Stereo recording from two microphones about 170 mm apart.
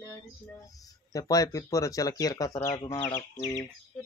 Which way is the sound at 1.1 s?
20° left (ahead or behind).